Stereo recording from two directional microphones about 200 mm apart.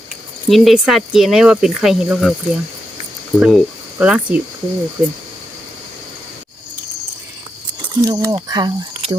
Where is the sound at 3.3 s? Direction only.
5° right (ahead or behind).